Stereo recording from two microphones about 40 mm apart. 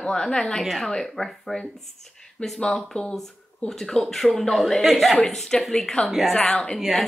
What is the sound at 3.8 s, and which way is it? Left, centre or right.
Speech, centre.